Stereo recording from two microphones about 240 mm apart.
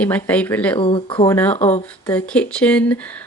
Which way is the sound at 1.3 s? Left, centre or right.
Centre.